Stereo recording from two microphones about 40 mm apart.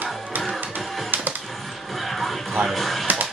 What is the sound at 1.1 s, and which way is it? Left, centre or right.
Music, right.